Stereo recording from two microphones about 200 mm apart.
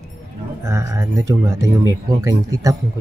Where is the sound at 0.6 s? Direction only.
15° right (ahead or behind).